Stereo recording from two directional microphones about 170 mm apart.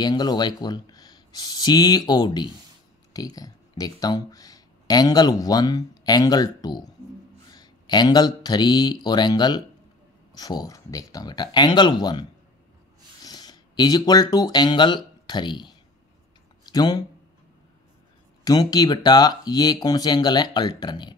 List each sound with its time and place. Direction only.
0.0 s speech: 25° left (ahead or behind)
18.4 s speech: 20° left (ahead or behind)